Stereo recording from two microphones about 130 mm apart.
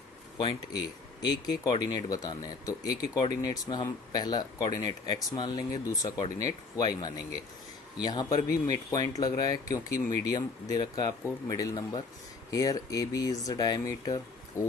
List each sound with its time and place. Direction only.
0.3 s speech: 35° left (ahead or behind)